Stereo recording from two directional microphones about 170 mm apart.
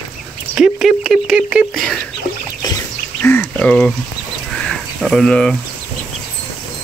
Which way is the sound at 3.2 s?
10° left (ahead or behind).